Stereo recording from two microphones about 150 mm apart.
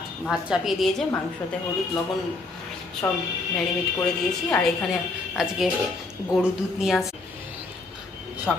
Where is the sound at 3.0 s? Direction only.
15° left (ahead or behind).